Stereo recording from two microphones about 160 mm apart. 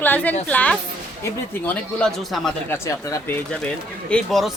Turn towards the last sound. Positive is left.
turn(degrees=0)  # may be behind; listen again after turning